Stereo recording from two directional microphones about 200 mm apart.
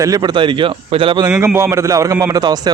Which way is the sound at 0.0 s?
20° right (ahead or behind).